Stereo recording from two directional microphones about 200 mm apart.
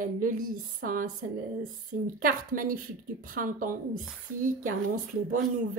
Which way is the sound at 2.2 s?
45° right (ahead or behind).